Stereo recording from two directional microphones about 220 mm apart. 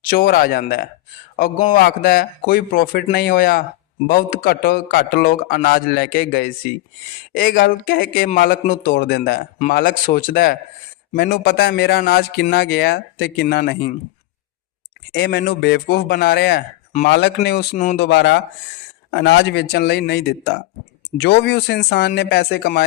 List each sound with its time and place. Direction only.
0.0 s speech: 40° left (ahead or behind)
15.1 s speech: 50° left (ahead or behind)